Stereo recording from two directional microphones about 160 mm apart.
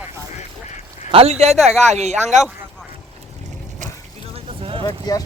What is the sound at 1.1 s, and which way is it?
Speech, 40° right (ahead or behind).